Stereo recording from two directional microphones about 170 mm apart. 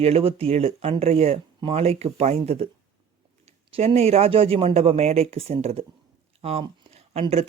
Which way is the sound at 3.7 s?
35° right (ahead or behind).